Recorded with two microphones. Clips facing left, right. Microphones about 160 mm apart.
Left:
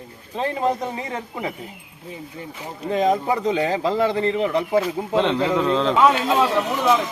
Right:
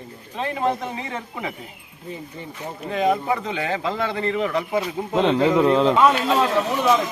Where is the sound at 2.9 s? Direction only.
35° left (ahead or behind).